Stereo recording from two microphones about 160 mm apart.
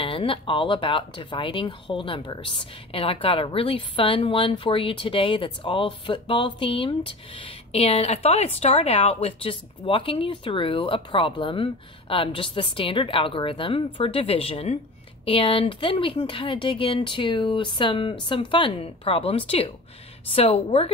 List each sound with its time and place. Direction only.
0.0 s speech: 35° left (ahead or behind)